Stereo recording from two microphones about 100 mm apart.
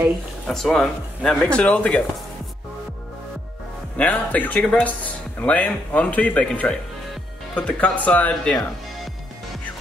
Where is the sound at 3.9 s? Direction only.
15° left (ahead or behind).